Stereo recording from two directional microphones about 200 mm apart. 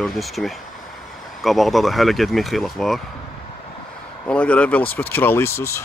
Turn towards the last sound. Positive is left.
turn(degrees=15)  # may be behind; listen again after turning